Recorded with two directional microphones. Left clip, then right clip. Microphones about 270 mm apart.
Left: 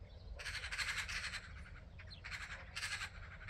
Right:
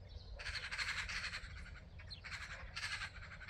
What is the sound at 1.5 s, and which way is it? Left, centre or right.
Bird, right.